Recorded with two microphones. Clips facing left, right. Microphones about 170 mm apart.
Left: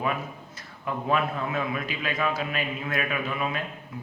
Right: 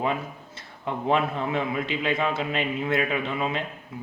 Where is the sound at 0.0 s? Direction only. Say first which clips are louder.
Right 2 dB; 25° right (ahead or behind).